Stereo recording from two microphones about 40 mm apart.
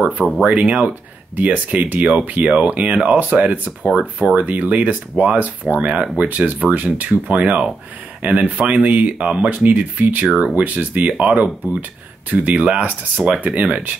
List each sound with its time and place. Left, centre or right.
0.0 s speech: right